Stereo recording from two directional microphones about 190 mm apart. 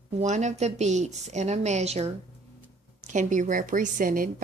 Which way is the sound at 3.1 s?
40° right (ahead or behind).